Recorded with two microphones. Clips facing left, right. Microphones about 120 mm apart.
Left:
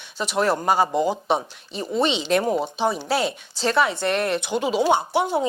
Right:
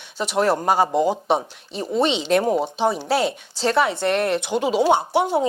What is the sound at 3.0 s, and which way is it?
A woman's voice, 50° right (ahead or behind).